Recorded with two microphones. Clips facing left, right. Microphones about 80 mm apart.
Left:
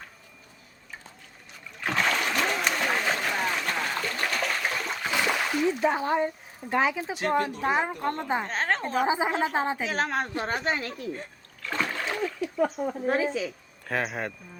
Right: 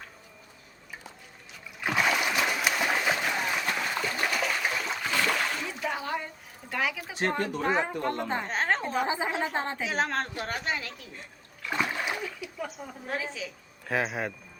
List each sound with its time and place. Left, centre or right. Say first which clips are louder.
1.8 s splash: even; centre
5.0 s a sound: left 1 dB; centre
5.6 s speech: left 8 dB; left
7.6 s a woman's voice: left 1 dB; centre
8.4 s a woman's voice: even; centre
9.0 s a woman's voice: left 4 dB; centre
9.3 s a woman's voice: left 4 dB; centre
10.3 s speech: left 4 dB; left
11.6 s splash: even; centre
12.4 s speech: left 11 dB; left
13.8 s a woman's voice: even; centre